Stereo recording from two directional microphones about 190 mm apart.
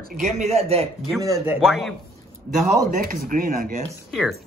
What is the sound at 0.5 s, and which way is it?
Speech, 30° right (ahead or behind).